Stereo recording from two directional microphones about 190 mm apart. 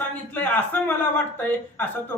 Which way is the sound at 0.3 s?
10° left (ahead or behind).